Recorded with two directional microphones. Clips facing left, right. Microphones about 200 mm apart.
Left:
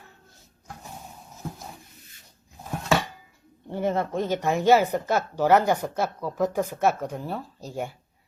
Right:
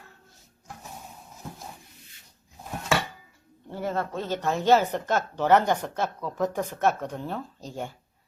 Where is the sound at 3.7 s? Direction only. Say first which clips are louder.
Left 4 dB; 20° left (ahead or behind).